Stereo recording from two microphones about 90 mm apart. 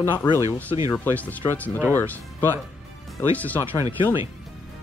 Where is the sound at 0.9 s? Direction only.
15° left (ahead or behind).